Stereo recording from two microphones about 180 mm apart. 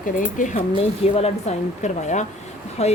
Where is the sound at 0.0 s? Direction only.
50° left (ahead or behind).